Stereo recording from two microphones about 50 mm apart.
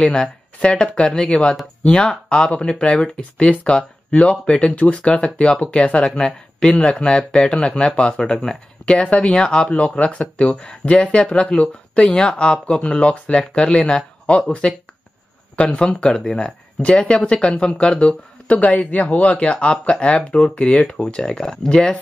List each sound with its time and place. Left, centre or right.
0.6 s speech: centre
9.7 s speech: left
18.5 s speech: left; by 21.9 s centre